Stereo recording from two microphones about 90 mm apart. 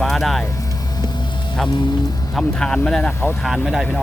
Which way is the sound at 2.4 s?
10° left (ahead or behind).